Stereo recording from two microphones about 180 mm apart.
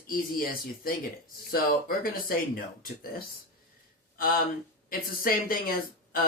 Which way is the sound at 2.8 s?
55° left (ahead or behind).